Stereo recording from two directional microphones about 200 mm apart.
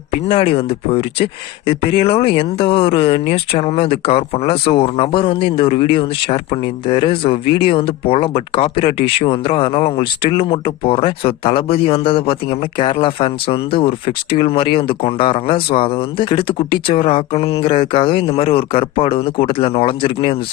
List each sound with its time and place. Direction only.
0.3 s speech: 30° left (ahead or behind)